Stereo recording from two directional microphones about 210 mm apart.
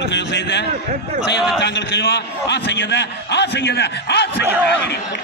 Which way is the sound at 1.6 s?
55° left (ahead or behind).